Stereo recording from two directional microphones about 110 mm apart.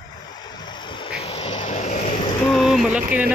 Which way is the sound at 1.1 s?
65° left (ahead or behind).